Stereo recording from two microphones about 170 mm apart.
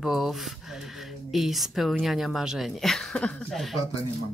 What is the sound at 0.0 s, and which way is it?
Speech, centre (ahead or behind).